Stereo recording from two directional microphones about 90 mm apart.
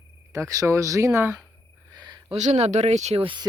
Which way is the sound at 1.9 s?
50° right (ahead or behind).